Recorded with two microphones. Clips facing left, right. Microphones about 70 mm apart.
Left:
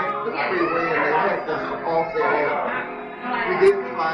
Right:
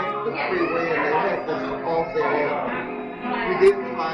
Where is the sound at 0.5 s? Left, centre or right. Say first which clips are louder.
Left 1 dB; left.